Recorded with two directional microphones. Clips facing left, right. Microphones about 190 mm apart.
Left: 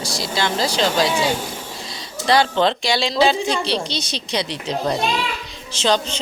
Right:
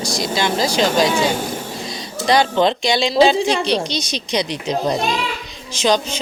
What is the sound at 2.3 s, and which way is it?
Speech, 15° right (ahead or behind).